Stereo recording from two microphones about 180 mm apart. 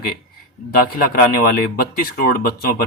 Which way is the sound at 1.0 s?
55° left (ahead or behind).